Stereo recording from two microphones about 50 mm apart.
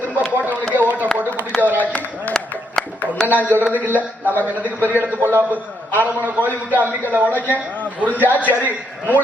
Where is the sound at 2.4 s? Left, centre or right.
Centre.